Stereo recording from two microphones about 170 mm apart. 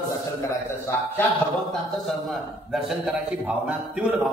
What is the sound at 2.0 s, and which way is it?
A man's voice, centre (ahead or behind).